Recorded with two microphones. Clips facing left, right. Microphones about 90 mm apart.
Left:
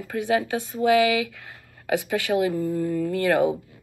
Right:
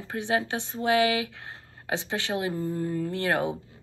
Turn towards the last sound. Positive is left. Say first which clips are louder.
# left 6 dB
turn(degrees=-25)  # may be behind; listen again after turning